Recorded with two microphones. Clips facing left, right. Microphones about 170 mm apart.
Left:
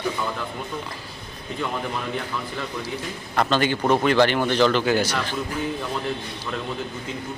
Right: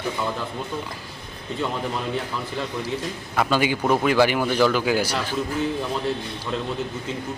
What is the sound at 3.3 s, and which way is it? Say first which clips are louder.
A man's voice: even; 10° right (ahead or behind).